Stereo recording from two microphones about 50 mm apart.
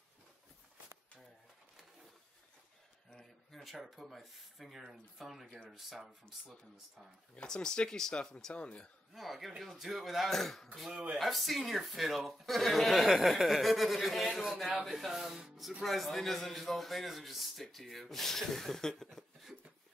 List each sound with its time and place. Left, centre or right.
3.1 s a man's voice: centre
7.3 s speech: centre
9.1 s a man's voice: centre